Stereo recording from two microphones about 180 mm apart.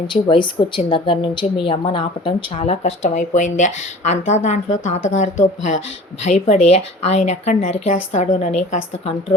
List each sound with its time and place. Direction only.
0.1 s a woman's voice: 25° left (ahead or behind)